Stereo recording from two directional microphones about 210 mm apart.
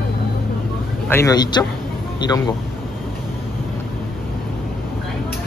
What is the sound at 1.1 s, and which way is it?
Speech, 15° left (ahead or behind).